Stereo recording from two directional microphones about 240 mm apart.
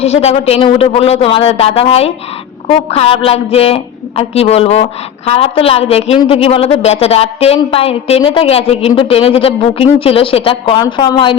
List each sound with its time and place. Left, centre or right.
0.0 s a woman's voice: left